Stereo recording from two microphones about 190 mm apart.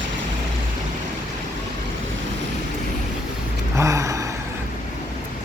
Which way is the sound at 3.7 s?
15° right (ahead or behind).